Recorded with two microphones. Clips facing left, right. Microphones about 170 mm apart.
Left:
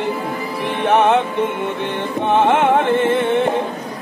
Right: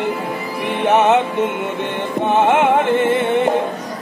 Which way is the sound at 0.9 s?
10° right (ahead or behind).